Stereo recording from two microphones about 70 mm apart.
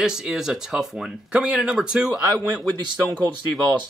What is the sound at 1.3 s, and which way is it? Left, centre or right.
Speech, centre.